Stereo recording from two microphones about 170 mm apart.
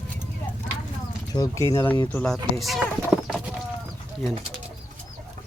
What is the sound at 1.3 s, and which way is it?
Speech, 20° left (ahead or behind).